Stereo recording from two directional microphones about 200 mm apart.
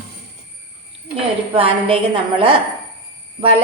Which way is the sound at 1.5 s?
25° right (ahead or behind).